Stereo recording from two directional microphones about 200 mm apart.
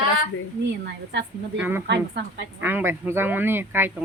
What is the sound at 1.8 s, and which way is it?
Speech, 55° right (ahead or behind).